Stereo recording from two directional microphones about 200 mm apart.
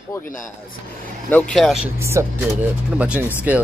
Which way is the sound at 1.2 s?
5° left (ahead or behind).